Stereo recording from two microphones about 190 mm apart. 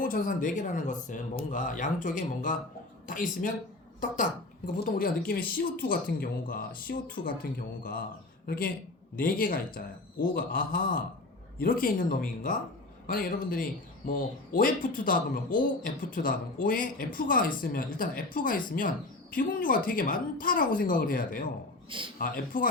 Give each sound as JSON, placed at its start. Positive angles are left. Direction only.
{"t": 0.0, "sound": "a woman's voice", "side_deg": 45}
{"t": 8.4, "sound": "a woman's voice", "side_deg": 50}